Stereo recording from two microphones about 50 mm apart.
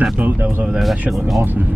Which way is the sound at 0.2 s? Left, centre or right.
Right.